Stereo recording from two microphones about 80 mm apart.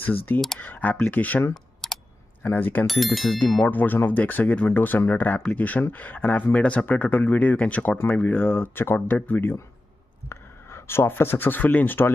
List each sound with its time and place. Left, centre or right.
0.0 s speech: left
1.5 s computer keyboard: centre
2.4 s speech: left
2.9 s speech: centre
3.6 s speech: left